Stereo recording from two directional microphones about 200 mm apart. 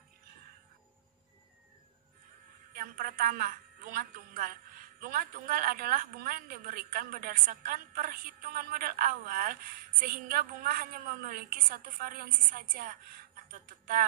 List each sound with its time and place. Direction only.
2.7 s a woman's voice: 45° right (ahead or behind)